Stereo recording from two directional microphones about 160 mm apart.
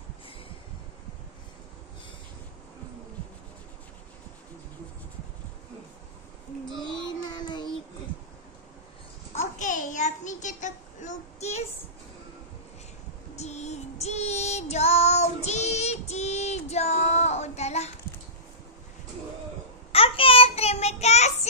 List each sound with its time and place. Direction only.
7.3 s child singing: 30° left (ahead or behind)
9.3 s a sound: 45° left (ahead or behind)
13.4 s music: 45° left (ahead or behind)
19.9 s child singing: 35° left (ahead or behind)